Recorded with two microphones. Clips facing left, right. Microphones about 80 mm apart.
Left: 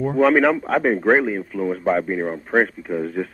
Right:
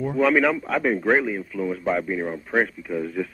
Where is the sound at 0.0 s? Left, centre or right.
Left.